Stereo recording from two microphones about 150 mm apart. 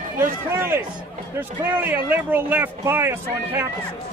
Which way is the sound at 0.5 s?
15° right (ahead or behind).